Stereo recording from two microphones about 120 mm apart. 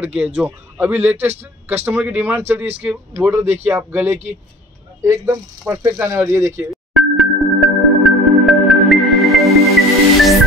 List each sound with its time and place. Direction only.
0.0 s speech: 10° right (ahead or behind)
6.7 s music: centre (ahead or behind)